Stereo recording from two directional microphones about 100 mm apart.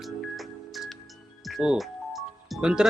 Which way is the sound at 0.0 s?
Centre (ahead or behind).